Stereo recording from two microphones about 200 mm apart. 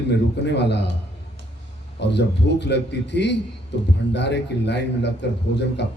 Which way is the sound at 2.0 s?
60° left (ahead or behind).